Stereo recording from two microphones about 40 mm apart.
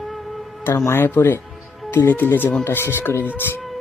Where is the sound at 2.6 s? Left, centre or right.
Left.